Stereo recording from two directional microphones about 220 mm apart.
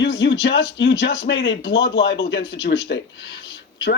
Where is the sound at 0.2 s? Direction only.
55° left (ahead or behind).